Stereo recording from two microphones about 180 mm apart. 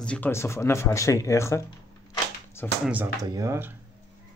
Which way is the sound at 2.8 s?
10° right (ahead or behind).